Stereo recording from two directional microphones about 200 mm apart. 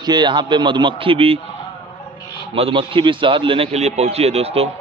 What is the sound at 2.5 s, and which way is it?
A man's voice, 25° right (ahead or behind).